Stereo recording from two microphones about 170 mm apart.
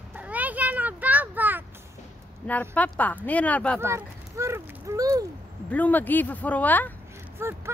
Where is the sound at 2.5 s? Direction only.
10° left (ahead or behind).